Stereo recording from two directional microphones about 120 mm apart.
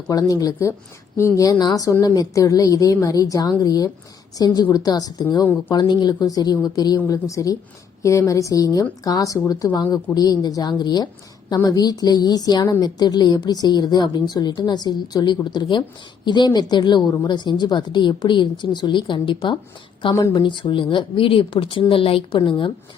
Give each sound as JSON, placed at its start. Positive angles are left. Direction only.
{"t": 0.1, "sound": "a woman's voice", "side_deg": 30}
{"t": 20.1, "sound": "a woman's voice", "side_deg": 25}
{"t": 20.4, "sound": "speech", "side_deg": 40}